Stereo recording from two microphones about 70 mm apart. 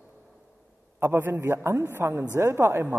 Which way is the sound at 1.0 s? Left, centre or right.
Right.